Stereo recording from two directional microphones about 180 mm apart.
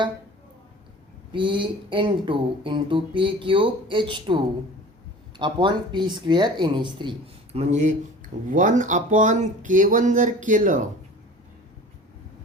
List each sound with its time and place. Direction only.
1.3 s speech: 30° right (ahead or behind)
5.4 s speech: 25° right (ahead or behind); by 10.8 s 45° right (ahead or behind)